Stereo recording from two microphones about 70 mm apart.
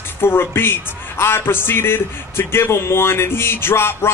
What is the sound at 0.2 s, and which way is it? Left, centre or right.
A man's voice, left.